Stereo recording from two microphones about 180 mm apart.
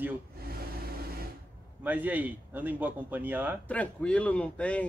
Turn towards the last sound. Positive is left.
turn(degrees=5)  # may be behind; listen again after turning